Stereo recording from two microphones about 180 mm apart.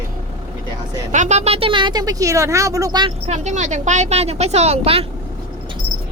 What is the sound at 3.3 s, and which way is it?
Speech, 40° right (ahead or behind).